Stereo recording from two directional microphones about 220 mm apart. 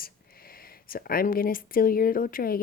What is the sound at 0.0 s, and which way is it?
Speech, 40° left (ahead or behind).